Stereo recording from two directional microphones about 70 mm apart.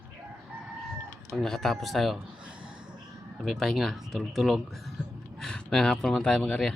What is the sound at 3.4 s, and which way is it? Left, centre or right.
Speech, centre.